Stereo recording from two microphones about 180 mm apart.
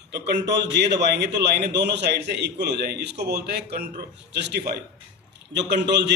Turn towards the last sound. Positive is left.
turn(degrees=-70)  # may be behind; listen again after turning